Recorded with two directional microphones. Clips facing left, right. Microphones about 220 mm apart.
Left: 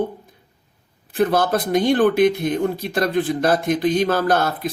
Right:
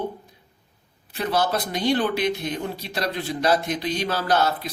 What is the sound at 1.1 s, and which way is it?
Speech, 50° left (ahead or behind).